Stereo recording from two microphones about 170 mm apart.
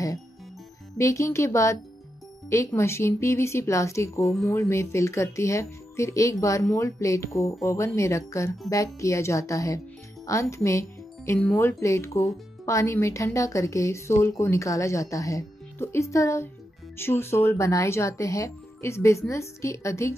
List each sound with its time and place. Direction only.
0.9 s speech: 15° left (ahead or behind)